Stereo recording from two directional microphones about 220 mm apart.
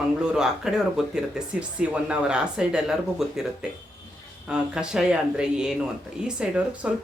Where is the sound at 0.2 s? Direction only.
5° right (ahead or behind).